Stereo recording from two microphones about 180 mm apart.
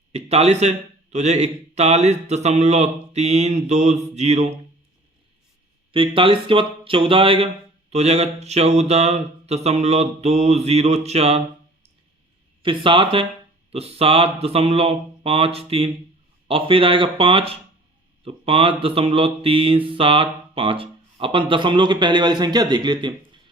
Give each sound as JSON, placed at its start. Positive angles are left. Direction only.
{"t": 0.1, "sound": "speech", "side_deg": -35}
{"t": 5.9, "sound": "speech", "side_deg": -30}
{"t": 12.6, "sound": "mantra", "side_deg": -30}
{"t": 13.7, "sound": "speech", "side_deg": -35}
{"t": 16.5, "sound": "mantra", "side_deg": -30}